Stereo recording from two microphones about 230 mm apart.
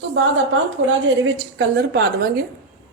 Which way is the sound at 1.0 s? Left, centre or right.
Right.